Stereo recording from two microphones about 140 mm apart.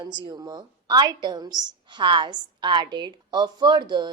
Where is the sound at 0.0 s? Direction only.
30° right (ahead or behind).